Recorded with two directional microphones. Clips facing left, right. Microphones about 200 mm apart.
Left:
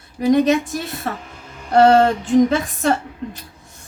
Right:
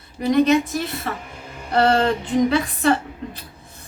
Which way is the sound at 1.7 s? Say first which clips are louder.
Left 5 dB; 45° left (ahead or behind).